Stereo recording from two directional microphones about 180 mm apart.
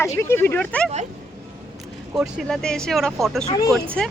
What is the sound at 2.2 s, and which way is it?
A woman's voice, centre (ahead or behind).